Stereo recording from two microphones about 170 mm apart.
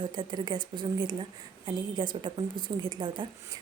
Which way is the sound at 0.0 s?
25° right (ahead or behind).